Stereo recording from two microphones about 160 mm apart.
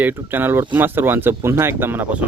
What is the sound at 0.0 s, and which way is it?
Speech, 10° right (ahead or behind).